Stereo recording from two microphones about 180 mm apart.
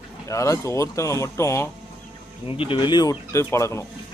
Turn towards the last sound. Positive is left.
turn(degrees=15)  # may be behind; listen again after turning